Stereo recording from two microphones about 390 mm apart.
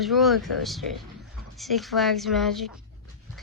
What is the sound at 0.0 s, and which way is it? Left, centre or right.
Speech, centre.